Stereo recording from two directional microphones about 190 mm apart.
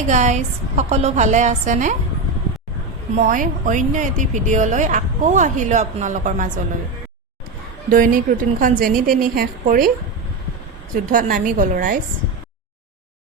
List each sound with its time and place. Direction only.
0.1 s speech: 40° right (ahead or behind)
3.2 s speech: 45° right (ahead or behind)
7.9 s a woman's voice: 45° right (ahead or behind)
10.9 s a woman's voice: 45° right (ahead or behind)